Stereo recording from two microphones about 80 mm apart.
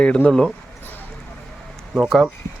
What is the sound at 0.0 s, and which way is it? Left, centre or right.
Speech, centre.